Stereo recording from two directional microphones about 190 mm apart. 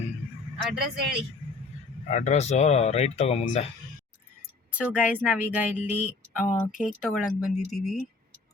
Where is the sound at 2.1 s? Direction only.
35° left (ahead or behind).